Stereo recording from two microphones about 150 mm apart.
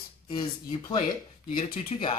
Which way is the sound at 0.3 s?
30° left (ahead or behind).